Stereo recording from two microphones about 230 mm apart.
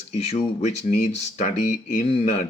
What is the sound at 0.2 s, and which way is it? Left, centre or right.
Speech, left.